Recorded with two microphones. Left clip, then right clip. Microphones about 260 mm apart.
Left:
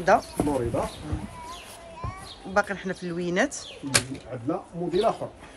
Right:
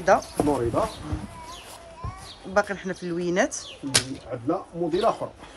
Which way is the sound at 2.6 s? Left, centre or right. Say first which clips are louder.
Right 1 dB; centre.